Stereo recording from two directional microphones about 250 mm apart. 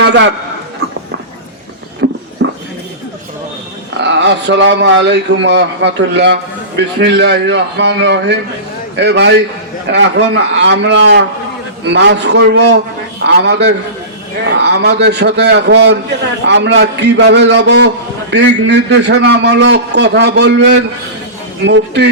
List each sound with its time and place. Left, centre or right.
0.0 s a man's voice: right
2.0 s a sound: right
2.4 s dog: right
4.0 s a man's voice: right